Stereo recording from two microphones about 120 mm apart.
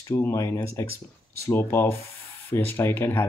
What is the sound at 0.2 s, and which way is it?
Speech, 25° left (ahead or behind).